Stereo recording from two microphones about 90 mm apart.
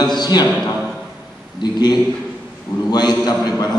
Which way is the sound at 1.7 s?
50° left (ahead or behind).